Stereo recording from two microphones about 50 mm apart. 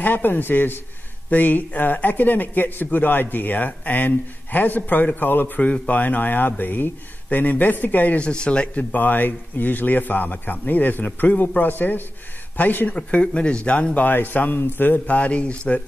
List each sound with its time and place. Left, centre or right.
0.0 s a man's voice: left
8.2 s a man's voice: left
12.9 s a man's voice: left
14.1 s a man's voice: left